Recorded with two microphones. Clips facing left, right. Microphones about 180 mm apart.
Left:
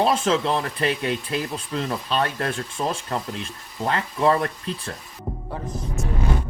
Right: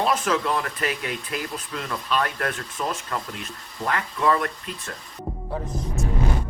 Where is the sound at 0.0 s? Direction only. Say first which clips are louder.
Left 3 dB; 25° left (ahead or behind).